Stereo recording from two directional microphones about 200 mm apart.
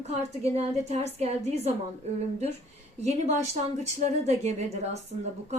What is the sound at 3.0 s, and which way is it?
A woman's voice, 35° right (ahead or behind).